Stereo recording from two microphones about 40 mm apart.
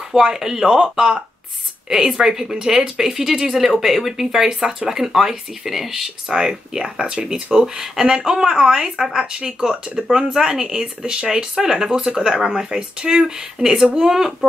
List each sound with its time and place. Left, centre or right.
0.1 s speech: centre
13.9 s speech: centre